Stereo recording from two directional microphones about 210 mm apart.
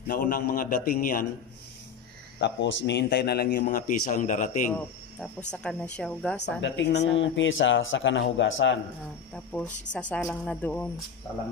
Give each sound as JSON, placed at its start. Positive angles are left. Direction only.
{"t": 0.0, "sound": "a man's voice", "side_deg": 40}
{"t": 2.4, "sound": "a man's voice", "side_deg": 55}
{"t": 5.5, "sound": "a woman's voice", "side_deg": 5}
{"t": 6.6, "sound": "a man's voice", "side_deg": 55}
{"t": 9.3, "sound": "a woman's voice", "side_deg": 5}